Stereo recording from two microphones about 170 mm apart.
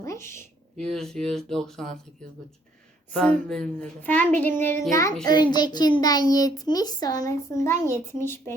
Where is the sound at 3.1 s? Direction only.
5° left (ahead or behind).